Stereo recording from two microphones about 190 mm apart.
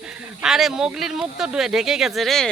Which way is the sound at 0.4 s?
5° right (ahead or behind).